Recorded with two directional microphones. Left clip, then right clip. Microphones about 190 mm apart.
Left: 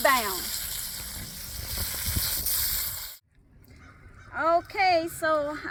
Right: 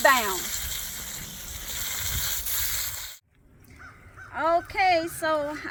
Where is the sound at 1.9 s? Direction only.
Centre (ahead or behind).